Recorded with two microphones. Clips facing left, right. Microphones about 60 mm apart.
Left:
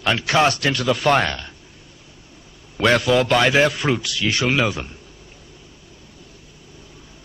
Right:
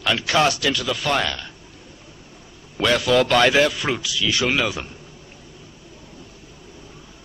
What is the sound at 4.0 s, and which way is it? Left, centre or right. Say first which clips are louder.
Speech: left 1 dB; left.